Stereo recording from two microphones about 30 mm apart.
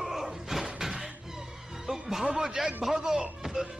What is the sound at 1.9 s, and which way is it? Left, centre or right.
Music, centre.